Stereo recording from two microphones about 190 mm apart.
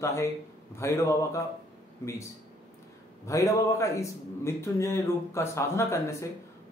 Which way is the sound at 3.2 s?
15° left (ahead or behind).